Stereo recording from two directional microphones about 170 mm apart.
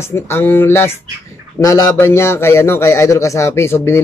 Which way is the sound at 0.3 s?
15° left (ahead or behind).